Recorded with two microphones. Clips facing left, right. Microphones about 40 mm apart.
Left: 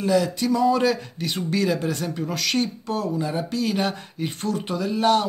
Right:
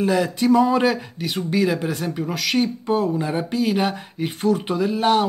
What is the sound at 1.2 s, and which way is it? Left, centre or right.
Speech, centre.